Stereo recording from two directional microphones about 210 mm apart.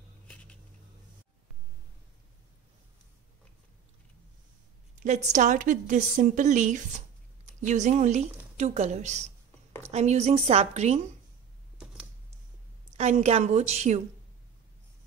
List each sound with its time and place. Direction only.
5.0 s a woman's voice: 35° right (ahead or behind)
11.8 s a sound: 5° right (ahead or behind)
12.9 s a woman's voice: 30° right (ahead or behind)